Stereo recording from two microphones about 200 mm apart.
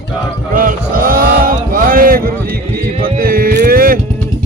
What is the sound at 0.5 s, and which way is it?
Chant, 45° right (ahead or behind).